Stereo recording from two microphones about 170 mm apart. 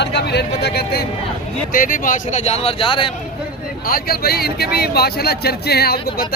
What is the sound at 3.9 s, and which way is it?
Speech, 65° left (ahead or behind).